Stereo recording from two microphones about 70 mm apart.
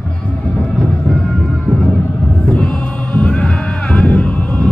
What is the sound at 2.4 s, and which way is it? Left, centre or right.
Music, centre.